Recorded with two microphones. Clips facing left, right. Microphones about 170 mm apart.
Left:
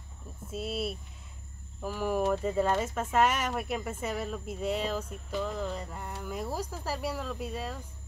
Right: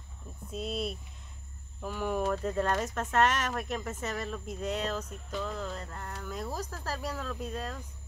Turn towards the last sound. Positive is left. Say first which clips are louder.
# left 1 dB
turn(degrees=10)  # may be behind; listen again after turning